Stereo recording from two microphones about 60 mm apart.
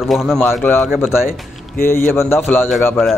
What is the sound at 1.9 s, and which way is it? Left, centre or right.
Speech, left.